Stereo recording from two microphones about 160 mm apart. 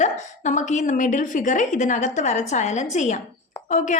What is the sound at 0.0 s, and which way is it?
A woman's voice, 50° left (ahead or behind).